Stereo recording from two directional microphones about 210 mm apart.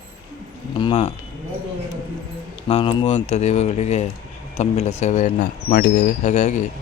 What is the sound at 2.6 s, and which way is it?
Speech, 25° left (ahead or behind).